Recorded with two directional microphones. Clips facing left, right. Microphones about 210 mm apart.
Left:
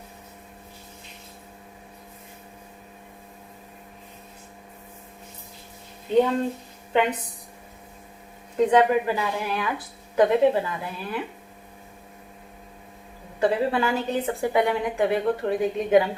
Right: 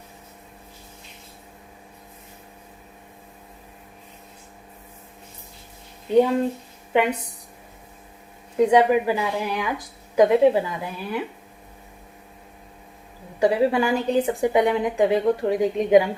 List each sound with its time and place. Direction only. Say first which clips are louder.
6.9 s a woman's voice: right 2 dB; 10° right (ahead or behind)
8.5 s a woman's voice: right 2 dB; 10° right (ahead or behind)
13.4 s a woman's voice: right 3 dB; 15° right (ahead or behind)